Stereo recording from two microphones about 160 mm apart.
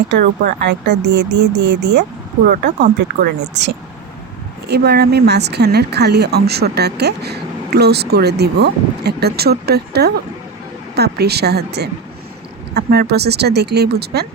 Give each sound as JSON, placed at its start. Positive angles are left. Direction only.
{"t": 0.1, "sound": "speech", "side_deg": -90}